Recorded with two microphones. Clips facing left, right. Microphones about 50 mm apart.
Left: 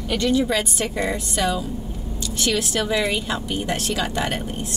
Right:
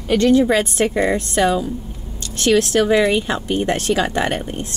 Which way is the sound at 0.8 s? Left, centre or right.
Right.